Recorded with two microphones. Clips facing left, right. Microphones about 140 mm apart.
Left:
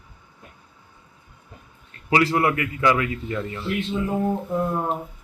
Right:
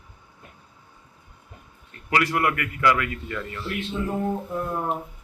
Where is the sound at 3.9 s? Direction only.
10° left (ahead or behind).